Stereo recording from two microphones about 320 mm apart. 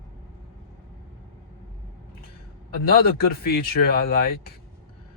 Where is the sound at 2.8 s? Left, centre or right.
Left.